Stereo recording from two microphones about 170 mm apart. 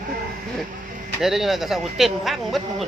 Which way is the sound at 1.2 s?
Centre (ahead or behind).